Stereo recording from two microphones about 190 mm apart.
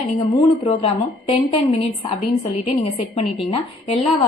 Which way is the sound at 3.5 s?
30° left (ahead or behind).